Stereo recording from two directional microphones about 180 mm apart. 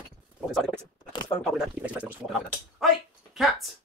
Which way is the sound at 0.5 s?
Centre (ahead or behind).